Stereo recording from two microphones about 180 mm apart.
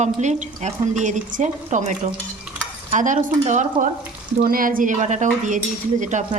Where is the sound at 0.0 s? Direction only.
40° right (ahead or behind).